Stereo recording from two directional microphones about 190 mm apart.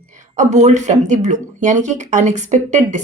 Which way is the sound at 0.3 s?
40° right (ahead or behind).